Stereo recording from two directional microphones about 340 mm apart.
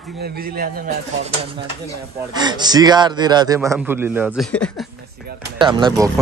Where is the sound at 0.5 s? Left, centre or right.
Right.